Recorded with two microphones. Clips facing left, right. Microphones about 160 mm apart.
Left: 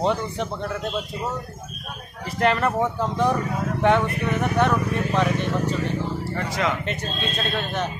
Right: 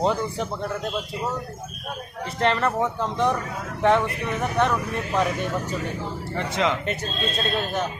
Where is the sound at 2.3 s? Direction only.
5° left (ahead or behind).